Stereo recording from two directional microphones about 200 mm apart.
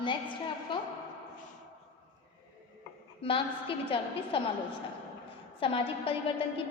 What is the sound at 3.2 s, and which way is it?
A woman's voice, 25° left (ahead or behind).